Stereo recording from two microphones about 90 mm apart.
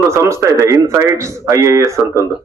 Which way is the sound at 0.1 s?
30° right (ahead or behind).